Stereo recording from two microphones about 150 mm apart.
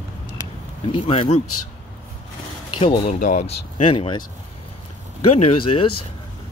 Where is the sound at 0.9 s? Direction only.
35° left (ahead or behind).